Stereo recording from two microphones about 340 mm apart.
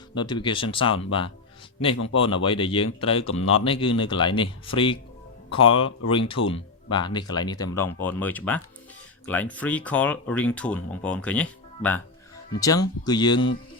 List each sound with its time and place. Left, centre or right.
0.2 s speech: centre